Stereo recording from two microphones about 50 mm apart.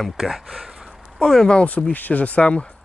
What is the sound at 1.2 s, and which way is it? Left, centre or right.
Speech, centre.